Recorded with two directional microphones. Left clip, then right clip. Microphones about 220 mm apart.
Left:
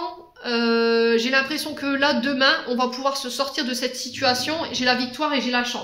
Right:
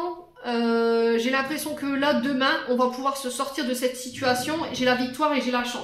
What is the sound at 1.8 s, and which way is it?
A woman's voice, 40° left (ahead or behind).